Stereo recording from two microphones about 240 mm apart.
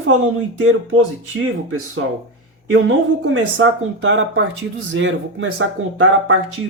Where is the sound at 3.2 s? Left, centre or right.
Right.